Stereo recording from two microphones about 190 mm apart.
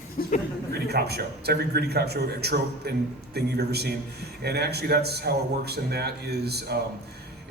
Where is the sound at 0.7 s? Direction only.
60° right (ahead or behind).